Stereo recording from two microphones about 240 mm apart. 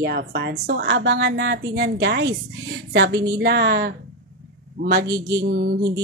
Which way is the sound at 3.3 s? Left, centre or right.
Right.